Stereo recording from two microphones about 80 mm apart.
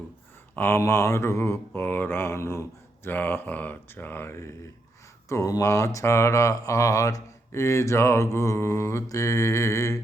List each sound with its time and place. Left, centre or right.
0.5 s speech: left